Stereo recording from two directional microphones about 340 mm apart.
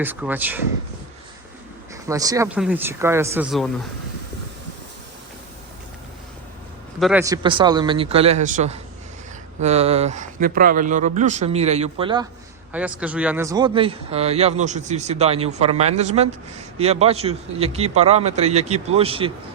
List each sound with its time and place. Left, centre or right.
0.0 s speech: centre
2.0 s speech: centre
7.0 s speech: centre
12.7 s speech: centre